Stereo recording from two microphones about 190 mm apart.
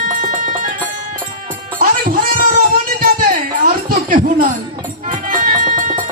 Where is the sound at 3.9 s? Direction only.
50° right (ahead or behind).